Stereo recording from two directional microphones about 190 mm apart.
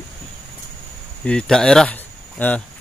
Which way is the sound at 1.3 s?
5° left (ahead or behind).